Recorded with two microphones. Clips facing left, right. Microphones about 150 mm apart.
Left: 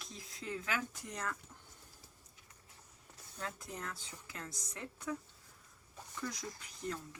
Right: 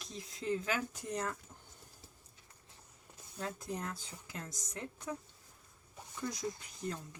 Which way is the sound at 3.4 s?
20° right (ahead or behind).